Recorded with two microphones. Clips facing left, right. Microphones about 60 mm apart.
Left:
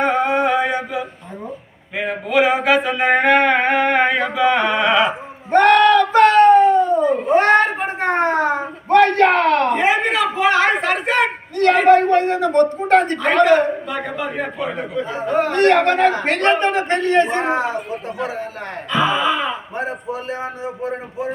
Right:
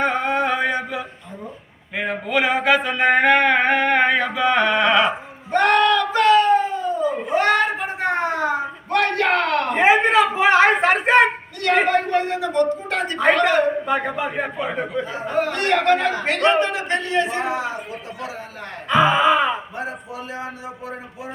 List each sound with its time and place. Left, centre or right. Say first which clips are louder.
0.0 s a sound: left 3 dB; centre
5.5 s a sound: left 5 dB; left
9.7 s a sound: right 2 dB; right
11.9 s speech: left 7 dB; left
13.8 s speech: right 2 dB; right
14.3 s speech: left 1 dB; centre
15.1 s speech: left 6 dB; left
18.9 s speech: right 2 dB; right
19.8 s speech: left 5 dB; left